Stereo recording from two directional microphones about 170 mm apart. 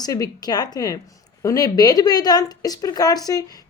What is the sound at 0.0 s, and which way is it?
Speech, 20° left (ahead or behind).